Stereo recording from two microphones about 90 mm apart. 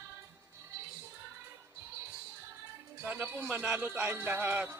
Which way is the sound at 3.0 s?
20° right (ahead or behind).